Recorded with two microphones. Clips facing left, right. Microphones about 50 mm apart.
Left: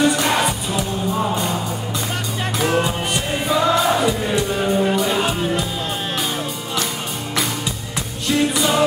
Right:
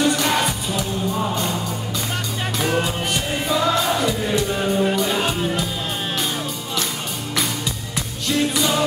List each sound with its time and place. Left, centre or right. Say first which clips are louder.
0.0 s music: left 2 dB; centre
2.6 s music: left 3 dB; centre
8.3 s music: left 2 dB; centre